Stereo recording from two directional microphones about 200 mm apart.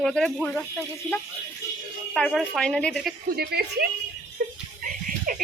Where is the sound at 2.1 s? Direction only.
Centre (ahead or behind).